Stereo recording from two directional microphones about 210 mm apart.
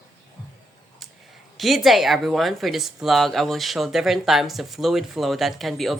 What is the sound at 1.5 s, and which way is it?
Speech, centre (ahead or behind).